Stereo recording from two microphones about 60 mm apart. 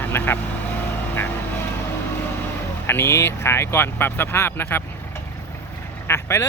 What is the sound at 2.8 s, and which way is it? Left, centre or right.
Speech, left.